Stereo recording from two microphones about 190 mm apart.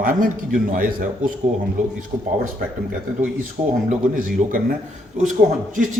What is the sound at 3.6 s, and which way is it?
A man's voice, 35° right (ahead or behind).